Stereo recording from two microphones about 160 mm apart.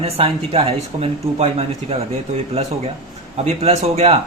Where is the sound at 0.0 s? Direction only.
35° right (ahead or behind).